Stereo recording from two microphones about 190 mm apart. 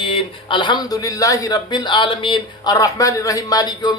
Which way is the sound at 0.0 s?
25° left (ahead or behind).